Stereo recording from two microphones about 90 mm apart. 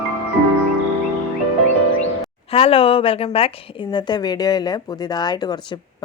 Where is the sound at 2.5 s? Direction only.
90° left.